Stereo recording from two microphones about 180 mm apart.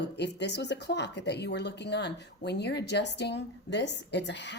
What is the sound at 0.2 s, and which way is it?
Speech, 70° left (ahead or behind).